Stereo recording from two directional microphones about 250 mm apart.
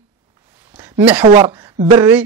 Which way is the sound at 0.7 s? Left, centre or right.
Centre.